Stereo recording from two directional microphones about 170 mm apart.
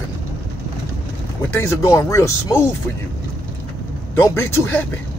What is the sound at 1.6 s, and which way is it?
Speech, 15° left (ahead or behind).